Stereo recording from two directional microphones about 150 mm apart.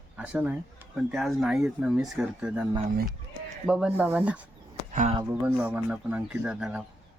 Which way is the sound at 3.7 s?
5° right (ahead or behind).